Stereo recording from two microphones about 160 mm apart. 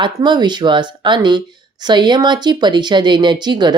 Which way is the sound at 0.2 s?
25° right (ahead or behind).